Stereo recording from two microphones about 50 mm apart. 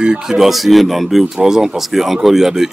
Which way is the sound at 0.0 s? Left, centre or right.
Centre.